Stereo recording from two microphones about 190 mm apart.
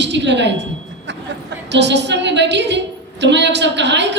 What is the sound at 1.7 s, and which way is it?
A woman's voice, 65° right (ahead or behind).